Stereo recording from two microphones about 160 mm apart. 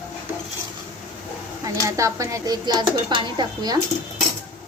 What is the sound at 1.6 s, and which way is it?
Speech, 20° right (ahead or behind).